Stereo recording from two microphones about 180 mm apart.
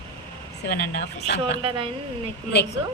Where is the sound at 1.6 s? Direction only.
30° right (ahead or behind).